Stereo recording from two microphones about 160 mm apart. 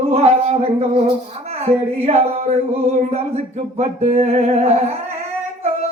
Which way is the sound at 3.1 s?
45° right (ahead or behind).